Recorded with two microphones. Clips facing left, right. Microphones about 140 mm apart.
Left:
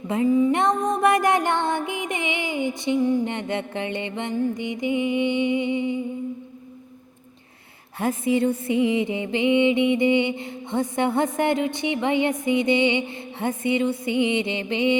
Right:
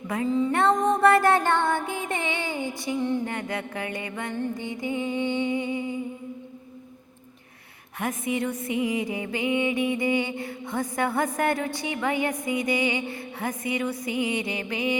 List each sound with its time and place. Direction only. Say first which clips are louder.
0.3 s music: left 2 dB; 15° left (ahead or behind)
7.9 s music: left 6 dB; 30° left (ahead or behind)